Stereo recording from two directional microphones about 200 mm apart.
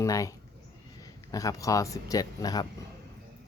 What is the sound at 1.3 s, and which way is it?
Speech, 15° left (ahead or behind).